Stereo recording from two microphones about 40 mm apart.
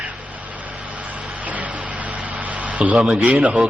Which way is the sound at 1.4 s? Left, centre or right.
Right.